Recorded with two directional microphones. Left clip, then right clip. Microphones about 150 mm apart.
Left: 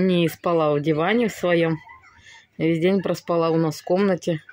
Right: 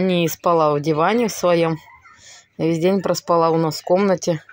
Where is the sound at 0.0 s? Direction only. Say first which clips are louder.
Right 3 dB; 10° left (ahead or behind).